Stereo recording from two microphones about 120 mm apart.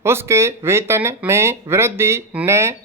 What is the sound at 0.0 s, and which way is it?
Speech, 20° right (ahead or behind).